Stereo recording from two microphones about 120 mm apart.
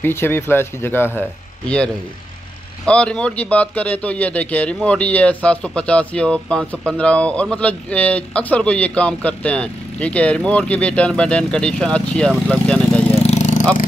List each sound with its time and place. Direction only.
0.0 s speech: 20° left (ahead or behind)
2.8 s speech: 10° left (ahead or behind)
13.1 s a sound: 70° left (ahead or behind)